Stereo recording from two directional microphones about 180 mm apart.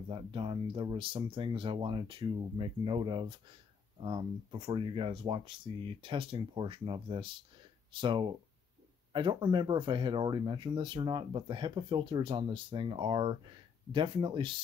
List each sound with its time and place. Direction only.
0.1 s speech: 30° right (ahead or behind)